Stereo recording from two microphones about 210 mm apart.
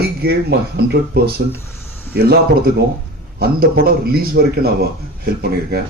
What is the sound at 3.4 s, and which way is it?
Speech, 45° right (ahead or behind).